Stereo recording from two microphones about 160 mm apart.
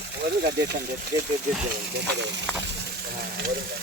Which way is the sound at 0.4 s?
90° right.